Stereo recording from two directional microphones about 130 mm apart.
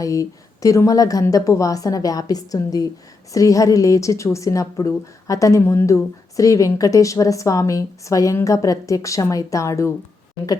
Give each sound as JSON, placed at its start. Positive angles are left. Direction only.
{"t": 0.0, "sound": "a woman's voice", "side_deg": 25}